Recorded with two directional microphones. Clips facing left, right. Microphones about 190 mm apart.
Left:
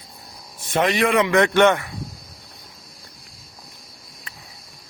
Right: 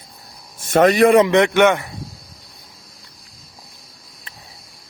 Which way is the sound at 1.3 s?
15° right (ahead or behind).